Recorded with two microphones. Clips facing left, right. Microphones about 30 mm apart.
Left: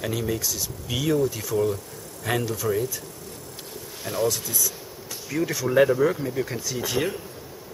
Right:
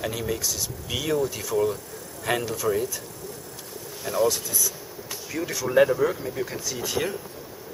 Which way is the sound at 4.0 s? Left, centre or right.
Centre.